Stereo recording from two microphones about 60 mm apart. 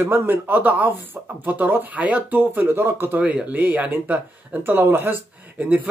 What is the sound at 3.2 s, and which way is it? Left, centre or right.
Speech, right.